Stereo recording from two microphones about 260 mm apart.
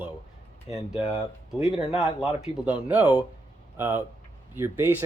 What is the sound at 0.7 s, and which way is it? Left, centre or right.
Speech, left.